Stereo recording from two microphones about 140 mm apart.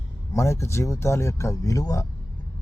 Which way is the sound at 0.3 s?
20° left (ahead or behind).